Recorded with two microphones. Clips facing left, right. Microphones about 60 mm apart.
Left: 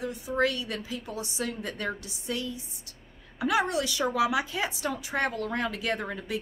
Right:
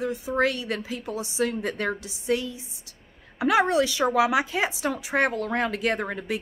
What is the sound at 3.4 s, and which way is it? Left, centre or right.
A woman's voice, right.